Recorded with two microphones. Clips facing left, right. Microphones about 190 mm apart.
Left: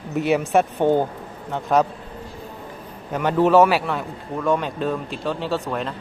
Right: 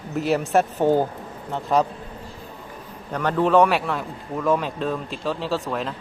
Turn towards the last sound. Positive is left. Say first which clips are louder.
# left 1 dB
turn(degrees=0)  # may be behind; listen again after turning